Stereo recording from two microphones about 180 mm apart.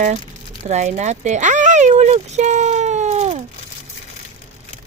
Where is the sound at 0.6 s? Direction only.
40° right (ahead or behind).